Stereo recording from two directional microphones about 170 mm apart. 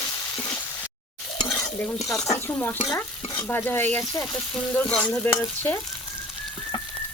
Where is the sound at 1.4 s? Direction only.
20° left (ahead or behind).